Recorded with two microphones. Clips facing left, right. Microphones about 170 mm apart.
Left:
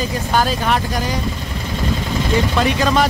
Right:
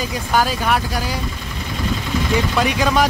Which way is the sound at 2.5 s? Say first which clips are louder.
Even; 10° right (ahead or behind).